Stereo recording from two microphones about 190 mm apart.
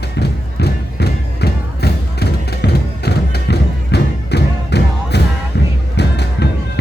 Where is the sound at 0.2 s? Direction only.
60° left (ahead or behind).